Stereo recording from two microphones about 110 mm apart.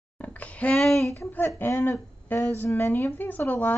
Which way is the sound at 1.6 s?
25° left (ahead or behind).